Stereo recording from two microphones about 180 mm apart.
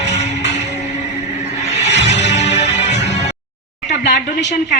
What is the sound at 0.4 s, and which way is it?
Music, 40° left (ahead or behind).